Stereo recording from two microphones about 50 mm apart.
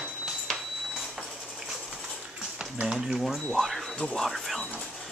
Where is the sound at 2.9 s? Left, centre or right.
Centre.